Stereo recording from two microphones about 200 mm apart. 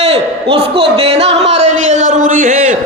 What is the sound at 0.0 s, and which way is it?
A man's voice, 30° right (ahead or behind).